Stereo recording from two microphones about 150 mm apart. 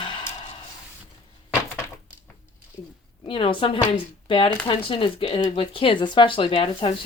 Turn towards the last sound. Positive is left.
turn(degrees=40)  # may be behind; listen again after turning